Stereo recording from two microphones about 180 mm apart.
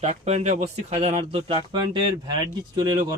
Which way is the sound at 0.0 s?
40° right (ahead or behind).